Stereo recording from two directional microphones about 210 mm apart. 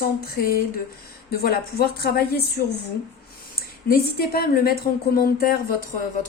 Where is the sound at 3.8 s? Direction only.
45° left (ahead or behind).